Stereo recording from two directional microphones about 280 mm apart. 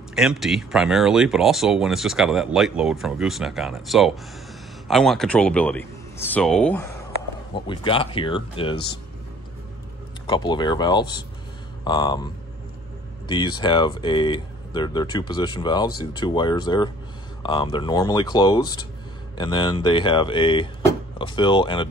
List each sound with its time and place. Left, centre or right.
0.1 s speech: centre
7.5 s speech: centre
10.2 s speech: centre
13.3 s speech: centre